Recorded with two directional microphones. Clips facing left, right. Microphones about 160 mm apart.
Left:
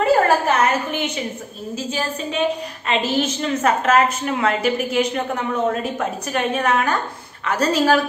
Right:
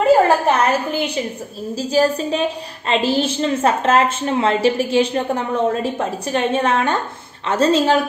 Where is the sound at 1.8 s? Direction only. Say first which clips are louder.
Right 9 dB; 35° right (ahead or behind).